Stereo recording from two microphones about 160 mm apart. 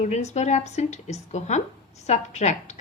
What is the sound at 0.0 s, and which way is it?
A woman's voice, 45° left (ahead or behind).